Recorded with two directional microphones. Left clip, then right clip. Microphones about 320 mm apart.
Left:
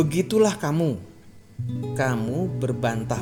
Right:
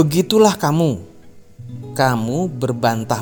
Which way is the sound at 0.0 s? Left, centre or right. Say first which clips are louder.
Right 7 dB; right.